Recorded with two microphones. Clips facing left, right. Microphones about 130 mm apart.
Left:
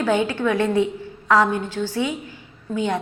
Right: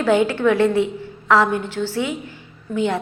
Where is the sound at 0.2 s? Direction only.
20° left (ahead or behind).